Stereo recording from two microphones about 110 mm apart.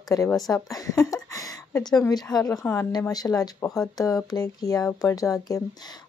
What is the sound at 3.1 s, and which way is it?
Speech, 35° left (ahead or behind).